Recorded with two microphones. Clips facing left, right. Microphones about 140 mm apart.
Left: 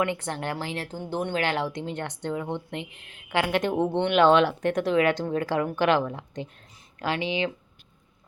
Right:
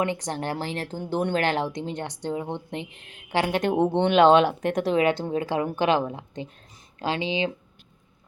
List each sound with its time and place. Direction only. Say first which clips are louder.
0.2 s a woman's voice: right 2 dB; 35° right (ahead or behind)
1.7 s speech: right 1 dB; 15° right (ahead or behind)
2.0 s a woman's voice: even; 30° right (ahead or behind)
3.8 s a woman's voice: right 3 dB; 25° right (ahead or behind)
4.6 s a woman's voice: even; 30° right (ahead or behind)